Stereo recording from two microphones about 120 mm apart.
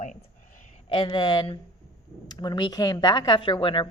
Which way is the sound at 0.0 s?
90° left.